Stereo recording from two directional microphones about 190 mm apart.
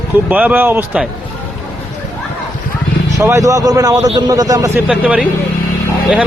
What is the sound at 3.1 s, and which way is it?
A man's voice, 15° right (ahead or behind).